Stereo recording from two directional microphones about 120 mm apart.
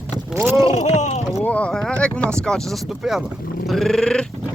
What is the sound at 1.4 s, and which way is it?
Speech, 10° left (ahead or behind).